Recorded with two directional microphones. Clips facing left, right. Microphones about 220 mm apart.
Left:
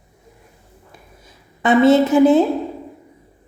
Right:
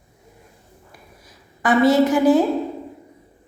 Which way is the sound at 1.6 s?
25° left (ahead or behind).